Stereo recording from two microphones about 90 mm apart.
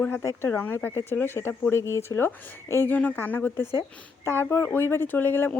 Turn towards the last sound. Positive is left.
turn(degrees=25)  # may be behind; listen again after turning